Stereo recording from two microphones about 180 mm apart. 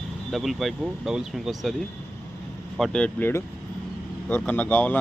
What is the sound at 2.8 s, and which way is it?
Speech, 5° left (ahead or behind).